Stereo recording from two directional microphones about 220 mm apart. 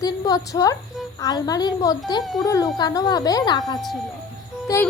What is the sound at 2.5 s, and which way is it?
A woman's voice, 15° left (ahead or behind).